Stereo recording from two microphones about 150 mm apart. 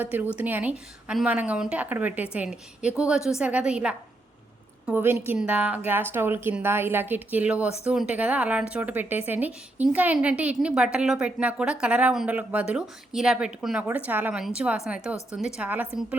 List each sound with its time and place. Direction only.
0.0 s a woman's voice: 10° right (ahead or behind)